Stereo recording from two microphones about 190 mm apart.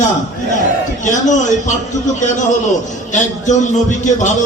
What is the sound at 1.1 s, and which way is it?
Speech, 40° left (ahead or behind).